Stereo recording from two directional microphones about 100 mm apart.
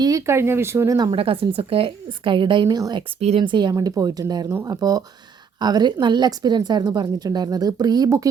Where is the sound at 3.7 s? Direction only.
35° right (ahead or behind).